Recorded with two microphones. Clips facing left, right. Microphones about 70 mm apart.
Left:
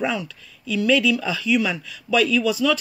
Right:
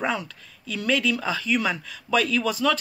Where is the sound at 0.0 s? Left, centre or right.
Right.